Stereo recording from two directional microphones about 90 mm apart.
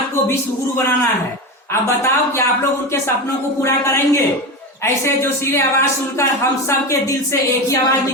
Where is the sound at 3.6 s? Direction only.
35° left (ahead or behind).